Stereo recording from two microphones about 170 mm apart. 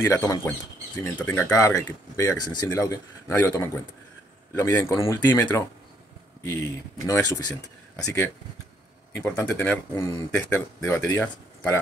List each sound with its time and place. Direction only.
0.0 s speech: 20° left (ahead or behind)
9.1 s speech: 10° left (ahead or behind)